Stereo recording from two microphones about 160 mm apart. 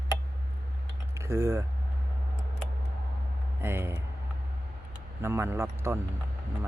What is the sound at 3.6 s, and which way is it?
Speech, 15° right (ahead or behind).